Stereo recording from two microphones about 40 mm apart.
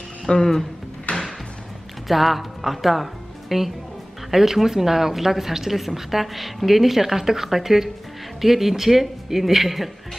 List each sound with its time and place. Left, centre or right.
0.3 s a sound: centre
1.1 s music: left
2.0 s a woman's voice: centre